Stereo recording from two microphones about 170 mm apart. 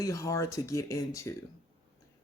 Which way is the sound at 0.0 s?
20° left (ahead or behind).